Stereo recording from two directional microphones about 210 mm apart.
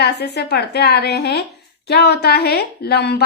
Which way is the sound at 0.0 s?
50° left (ahead or behind).